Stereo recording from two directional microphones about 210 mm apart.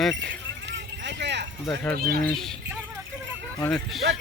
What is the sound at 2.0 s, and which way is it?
Speech, 45° right (ahead or behind).